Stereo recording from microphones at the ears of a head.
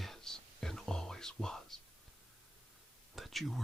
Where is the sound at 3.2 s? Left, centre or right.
Centre.